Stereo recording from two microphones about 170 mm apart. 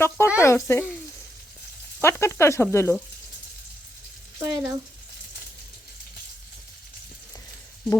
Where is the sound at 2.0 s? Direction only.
15° left (ahead or behind).